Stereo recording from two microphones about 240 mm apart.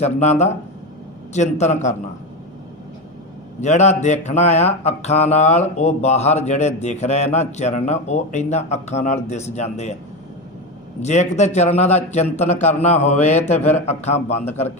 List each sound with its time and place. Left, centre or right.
0.0 s mantra: left
3.6 s mantra: left
11.0 s mantra: left